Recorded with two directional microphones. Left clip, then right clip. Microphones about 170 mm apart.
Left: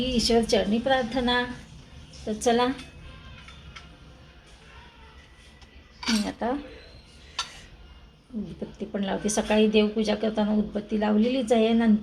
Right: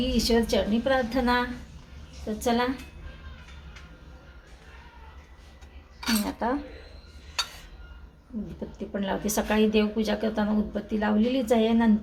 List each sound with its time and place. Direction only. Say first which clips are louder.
0.0 s a woman's voice: left 1 dB; 15° left (ahead or behind)
6.1 s cutlery: right 1 dB; 5° left (ahead or behind)
8.9 s a woman's voice: left 1 dB; 10° left (ahead or behind)